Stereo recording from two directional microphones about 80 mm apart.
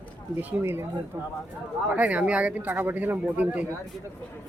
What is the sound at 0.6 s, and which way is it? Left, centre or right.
Speech, right.